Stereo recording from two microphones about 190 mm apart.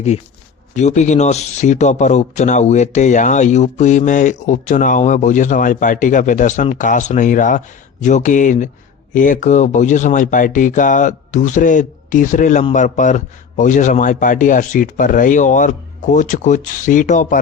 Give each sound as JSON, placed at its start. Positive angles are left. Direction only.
{"t": 0.8, "sound": "speech", "side_deg": 40}